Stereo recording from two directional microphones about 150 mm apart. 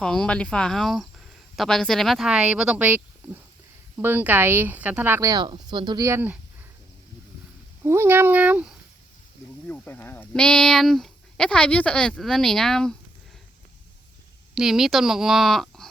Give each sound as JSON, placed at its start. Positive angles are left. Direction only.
{"t": 0.0, "sound": "speech", "side_deg": 5}
{"t": 5.3, "sound": "speech", "side_deg": -30}
{"t": 6.1, "sound": "speech", "side_deg": -15}
{"t": 7.9, "sound": "speech", "side_deg": -15}
{"t": 9.6, "sound": "speech", "side_deg": 10}
{"t": 14.5, "sound": "speech", "side_deg": -5}